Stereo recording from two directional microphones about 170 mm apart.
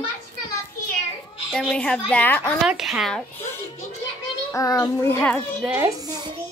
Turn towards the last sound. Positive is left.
turn(degrees=-10)  # may be behind; listen again after turning